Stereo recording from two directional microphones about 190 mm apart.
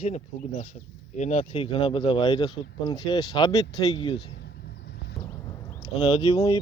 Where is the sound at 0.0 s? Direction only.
35° left (ahead or behind).